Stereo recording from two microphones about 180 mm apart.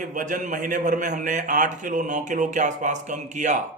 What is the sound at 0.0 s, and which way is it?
A man's voice, 45° right (ahead or behind).